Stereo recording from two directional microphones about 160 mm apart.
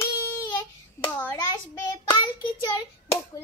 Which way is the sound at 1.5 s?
25° left (ahead or behind).